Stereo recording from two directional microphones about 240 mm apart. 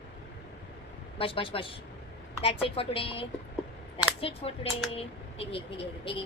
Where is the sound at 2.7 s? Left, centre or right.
Left.